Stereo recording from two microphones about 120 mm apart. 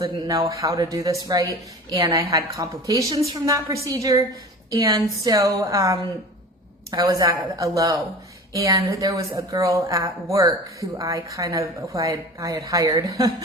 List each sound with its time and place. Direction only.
0.0 s a woman's voice: 35° right (ahead or behind)